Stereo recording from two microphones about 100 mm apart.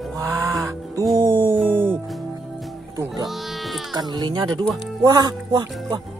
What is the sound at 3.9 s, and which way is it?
Speech, 45° right (ahead or behind).